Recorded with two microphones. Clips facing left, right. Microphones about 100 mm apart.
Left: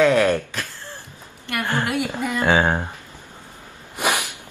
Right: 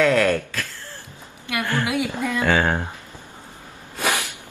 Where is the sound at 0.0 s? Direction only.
15° left (ahead or behind).